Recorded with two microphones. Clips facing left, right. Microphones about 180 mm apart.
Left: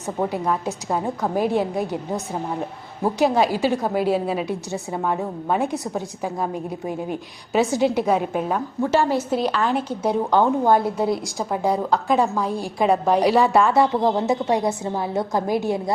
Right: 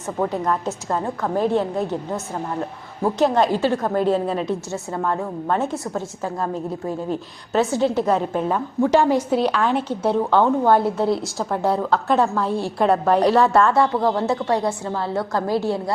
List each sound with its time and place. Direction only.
0.2 s a woman's voice: 10° left (ahead or behind)
8.9 s a woman's voice: 15° right (ahead or behind)
9.4 s a woman's voice: 5° left (ahead or behind)